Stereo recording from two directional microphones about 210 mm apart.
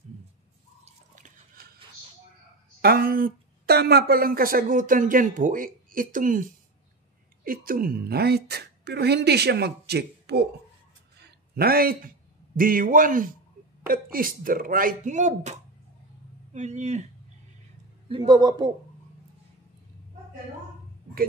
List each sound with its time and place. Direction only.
2.8 s a woman's voice: 45° right (ahead or behind)
11.2 s a sound: 45° right (ahead or behind)
12.5 s speech: 40° right (ahead or behind)
16.5 s speech: 35° right (ahead or behind)
18.0 s speech: 20° right (ahead or behind)